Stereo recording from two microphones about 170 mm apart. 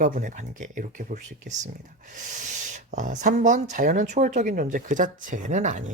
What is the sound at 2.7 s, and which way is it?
Speech, 50° right (ahead or behind).